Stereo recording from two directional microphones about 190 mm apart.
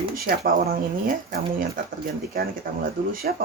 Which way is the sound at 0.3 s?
50° right (ahead or behind).